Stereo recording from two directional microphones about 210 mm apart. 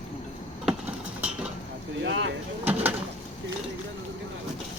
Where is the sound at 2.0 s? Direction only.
60° right (ahead or behind).